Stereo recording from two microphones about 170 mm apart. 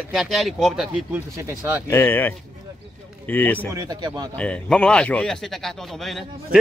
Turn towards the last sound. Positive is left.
turn(degrees=0)  # may be behind; listen again after turning